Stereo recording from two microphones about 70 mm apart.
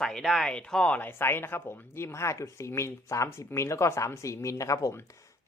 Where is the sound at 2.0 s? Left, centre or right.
Left.